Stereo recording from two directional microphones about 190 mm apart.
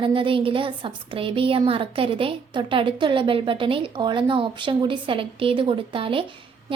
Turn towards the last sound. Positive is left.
turn(degrees=-30)  # may be behind; listen again after turning